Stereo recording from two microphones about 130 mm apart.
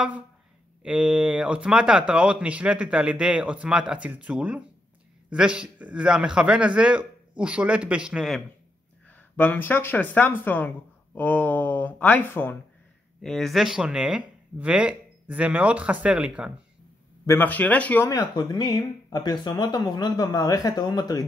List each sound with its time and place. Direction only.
0.8 s speech: 10° right (ahead or behind)
9.0 s speech: 15° left (ahead or behind)
13.2 s speech: 5° left (ahead or behind)
17.3 s speech: 15° left (ahead or behind)
18.0 s speech: 30° left (ahead or behind)